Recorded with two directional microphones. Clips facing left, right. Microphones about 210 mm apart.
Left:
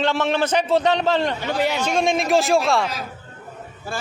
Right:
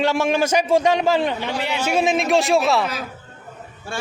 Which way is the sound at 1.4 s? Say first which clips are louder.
Left 3 dB; 45° left (ahead or behind).